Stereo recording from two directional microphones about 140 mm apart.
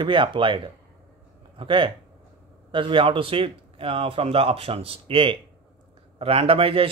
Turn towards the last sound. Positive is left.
turn(degrees=-40)  # may be behind; listen again after turning